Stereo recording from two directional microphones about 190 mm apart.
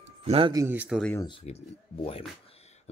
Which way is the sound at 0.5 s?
10° right (ahead or behind).